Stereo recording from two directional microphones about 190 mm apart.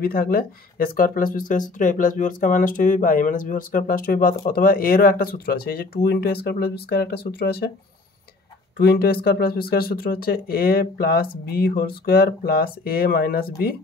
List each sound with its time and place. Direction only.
0.0 s speech: 50° left (ahead or behind)
8.7 s speech: 55° left (ahead or behind)